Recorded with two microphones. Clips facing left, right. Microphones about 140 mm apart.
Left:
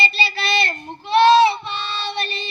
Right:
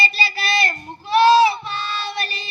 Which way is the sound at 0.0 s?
25° left (ahead or behind).